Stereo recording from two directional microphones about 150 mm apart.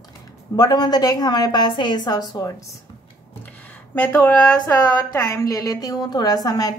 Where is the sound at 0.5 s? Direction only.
25° left (ahead or behind).